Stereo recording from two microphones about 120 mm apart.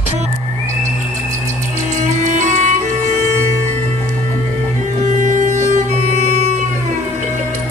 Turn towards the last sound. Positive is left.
turn(degrees=-75)  # may be behind; listen again after turning